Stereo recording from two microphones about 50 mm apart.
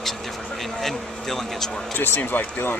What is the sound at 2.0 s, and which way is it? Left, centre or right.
Speech, left.